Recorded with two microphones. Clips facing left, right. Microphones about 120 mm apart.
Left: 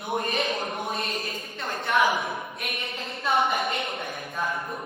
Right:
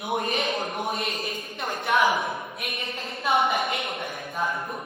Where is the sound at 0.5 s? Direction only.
Centre (ahead or behind).